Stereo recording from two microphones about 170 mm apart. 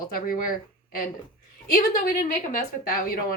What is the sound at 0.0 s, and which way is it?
A woman's voice, 60° left (ahead or behind).